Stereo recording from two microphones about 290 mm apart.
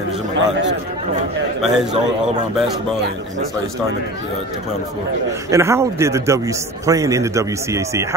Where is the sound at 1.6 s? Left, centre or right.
Centre.